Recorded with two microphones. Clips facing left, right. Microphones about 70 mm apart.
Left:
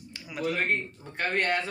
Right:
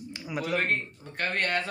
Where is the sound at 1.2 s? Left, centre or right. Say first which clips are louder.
Left 2 dB; centre.